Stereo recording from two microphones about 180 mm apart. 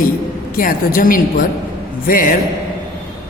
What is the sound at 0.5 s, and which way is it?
Speech, 50° left (ahead or behind).